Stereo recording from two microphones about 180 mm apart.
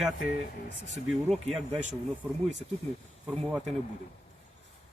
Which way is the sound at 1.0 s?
Centre (ahead or behind).